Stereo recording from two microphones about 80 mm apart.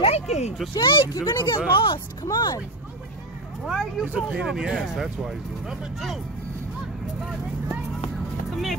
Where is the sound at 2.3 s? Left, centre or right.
Left.